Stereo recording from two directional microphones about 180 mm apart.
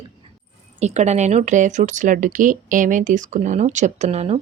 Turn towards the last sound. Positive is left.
turn(degrees=-35)  # may be behind; listen again after turning